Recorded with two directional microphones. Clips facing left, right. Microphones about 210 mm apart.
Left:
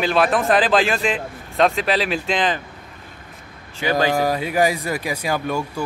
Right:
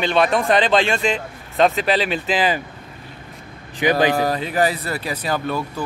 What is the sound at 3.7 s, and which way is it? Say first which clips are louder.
Speech: right 3 dB; 15° right (ahead or behind).